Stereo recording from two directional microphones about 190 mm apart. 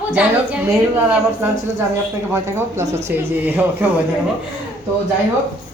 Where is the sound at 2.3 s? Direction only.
15° right (ahead or behind).